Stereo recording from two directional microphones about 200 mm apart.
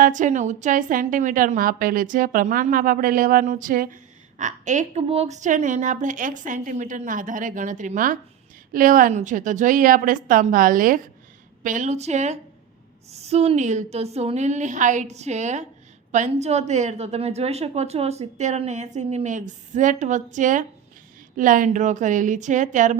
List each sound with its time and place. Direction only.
0.0 s a woman's voice: 40° right (ahead or behind)